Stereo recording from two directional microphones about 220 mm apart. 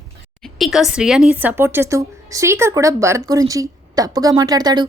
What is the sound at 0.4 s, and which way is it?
Speech, centre (ahead or behind).